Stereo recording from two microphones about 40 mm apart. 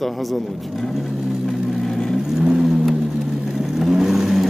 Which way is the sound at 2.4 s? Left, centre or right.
Centre.